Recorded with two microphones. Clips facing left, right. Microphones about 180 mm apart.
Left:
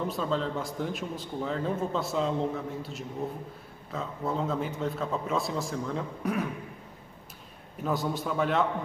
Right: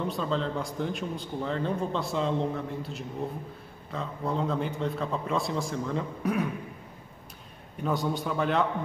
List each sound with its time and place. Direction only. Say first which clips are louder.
0.0 s speech: even; centre (ahead or behind)
7.7 s speech: right 1 dB; centre (ahead or behind)